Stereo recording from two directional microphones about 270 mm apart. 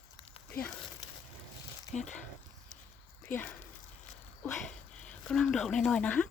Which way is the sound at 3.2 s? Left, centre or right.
Centre.